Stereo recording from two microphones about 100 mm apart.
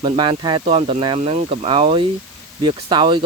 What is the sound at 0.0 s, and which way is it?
Speech, 55° right (ahead or behind).